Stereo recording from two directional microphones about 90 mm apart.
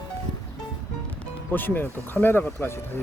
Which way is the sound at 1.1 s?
20° left (ahead or behind).